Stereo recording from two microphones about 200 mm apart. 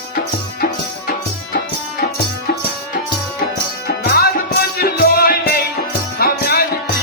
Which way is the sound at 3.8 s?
50° left (ahead or behind).